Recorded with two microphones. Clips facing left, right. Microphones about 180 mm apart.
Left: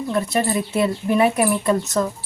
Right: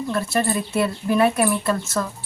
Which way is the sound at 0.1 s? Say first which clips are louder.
Left 2 dB; 15° left (ahead or behind).